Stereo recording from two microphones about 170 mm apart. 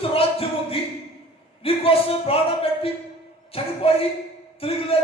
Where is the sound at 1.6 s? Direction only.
35° left (ahead or behind).